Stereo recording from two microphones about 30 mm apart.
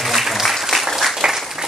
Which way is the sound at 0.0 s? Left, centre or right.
Centre.